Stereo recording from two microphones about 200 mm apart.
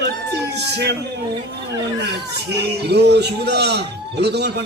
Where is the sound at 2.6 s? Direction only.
55° right (ahead or behind).